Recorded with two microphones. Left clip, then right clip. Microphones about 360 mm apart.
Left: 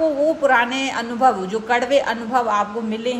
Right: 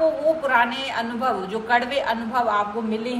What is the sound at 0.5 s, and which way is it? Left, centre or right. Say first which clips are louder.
A woman's voice: left 3 dB; left.